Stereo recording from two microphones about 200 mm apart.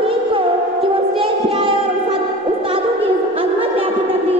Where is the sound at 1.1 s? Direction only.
25° right (ahead or behind).